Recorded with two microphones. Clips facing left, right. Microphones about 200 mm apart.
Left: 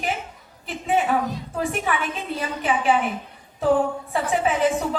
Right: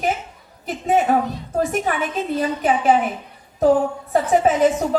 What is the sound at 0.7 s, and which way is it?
A woman's voice, 40° right (ahead or behind).